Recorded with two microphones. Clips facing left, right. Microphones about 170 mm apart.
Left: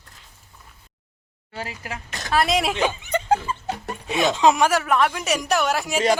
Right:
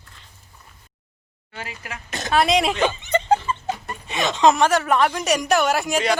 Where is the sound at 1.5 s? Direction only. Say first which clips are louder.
Left 3 dB; 35° left (ahead or behind).